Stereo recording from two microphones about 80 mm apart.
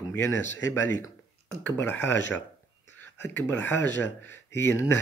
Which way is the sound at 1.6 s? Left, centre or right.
Left.